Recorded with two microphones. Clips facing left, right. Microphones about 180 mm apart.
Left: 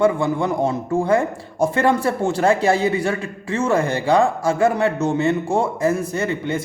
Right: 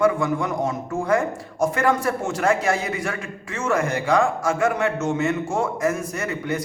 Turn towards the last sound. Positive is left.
turn(degrees=25)  # may be behind; listen again after turning